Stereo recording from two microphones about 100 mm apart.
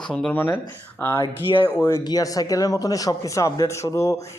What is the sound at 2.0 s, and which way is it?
A man's voice, 40° left (ahead or behind).